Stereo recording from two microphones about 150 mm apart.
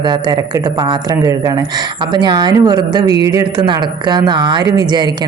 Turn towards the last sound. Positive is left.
turn(degrees=-25)  # may be behind; listen again after turning